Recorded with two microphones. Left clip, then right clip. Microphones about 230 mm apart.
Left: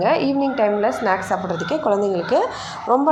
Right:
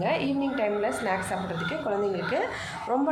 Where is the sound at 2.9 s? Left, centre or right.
Centre.